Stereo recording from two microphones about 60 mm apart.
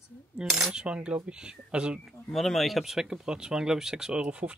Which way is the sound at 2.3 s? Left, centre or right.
Centre.